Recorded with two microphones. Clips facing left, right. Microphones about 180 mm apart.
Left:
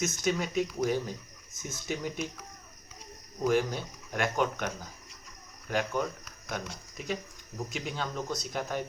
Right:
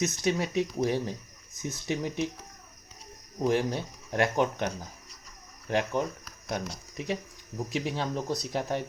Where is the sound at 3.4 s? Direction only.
30° right (ahead or behind).